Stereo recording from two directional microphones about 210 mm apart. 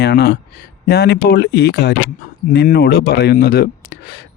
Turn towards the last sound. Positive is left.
turn(degrees=50)  # may be behind; listen again after turning